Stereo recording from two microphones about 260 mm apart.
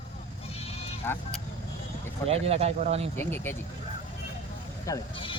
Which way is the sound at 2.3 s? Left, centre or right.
Right.